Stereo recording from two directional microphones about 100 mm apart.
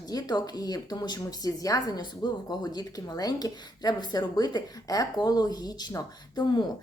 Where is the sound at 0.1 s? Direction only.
40° left (ahead or behind).